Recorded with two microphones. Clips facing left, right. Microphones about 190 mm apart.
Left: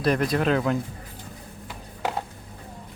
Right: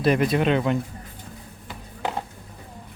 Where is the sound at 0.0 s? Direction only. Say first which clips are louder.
Right 2 dB; centre (ahead or behind).